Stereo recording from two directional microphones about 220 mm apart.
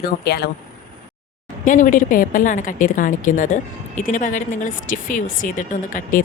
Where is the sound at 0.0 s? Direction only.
45° left (ahead or behind).